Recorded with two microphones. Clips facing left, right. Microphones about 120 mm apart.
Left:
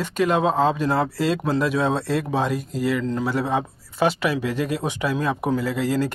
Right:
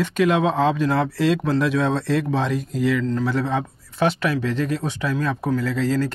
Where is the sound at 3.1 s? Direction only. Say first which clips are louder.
Right 1 dB; 20° left (ahead or behind).